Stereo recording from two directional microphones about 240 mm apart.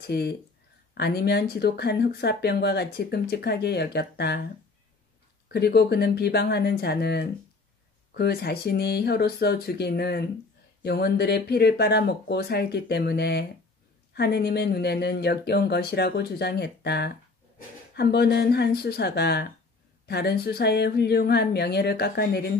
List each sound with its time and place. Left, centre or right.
0.0 s speech: left
5.5 s speech: left